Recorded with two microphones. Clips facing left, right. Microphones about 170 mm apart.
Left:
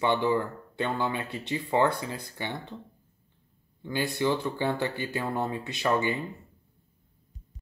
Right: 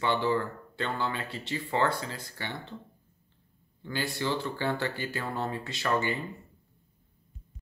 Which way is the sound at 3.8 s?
20° left (ahead or behind).